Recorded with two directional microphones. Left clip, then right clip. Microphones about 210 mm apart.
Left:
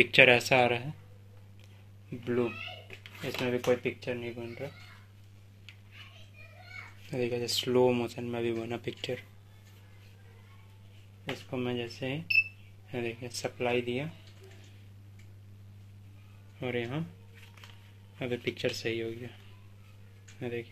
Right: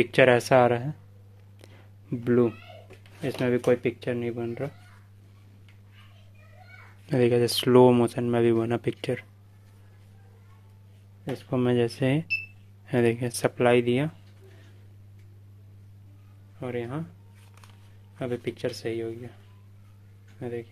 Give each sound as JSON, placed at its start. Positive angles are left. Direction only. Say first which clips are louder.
{"t": 0.0, "sound": "speech", "louder": "right 1 dB", "side_deg": -20}
{"t": 2.2, "sound": "speech", "louder": "right 8 dB", "side_deg": -50}
{"t": 7.1, "sound": "speech", "louder": "right 10 dB", "side_deg": -40}
{"t": 11.2, "sound": "speech", "louder": "right 8 dB", "side_deg": -50}
{"t": 16.5, "sound": "speech", "louder": "right 2 dB", "side_deg": -5}
{"t": 18.2, "sound": "speech", "louder": "right 2 dB", "side_deg": -15}
{"t": 20.3, "sound": "speech", "louder": "right 3 dB", "side_deg": -5}